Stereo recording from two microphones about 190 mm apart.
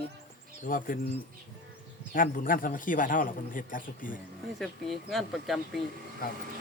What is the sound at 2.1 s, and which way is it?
A man's voice, 45° left (ahead or behind).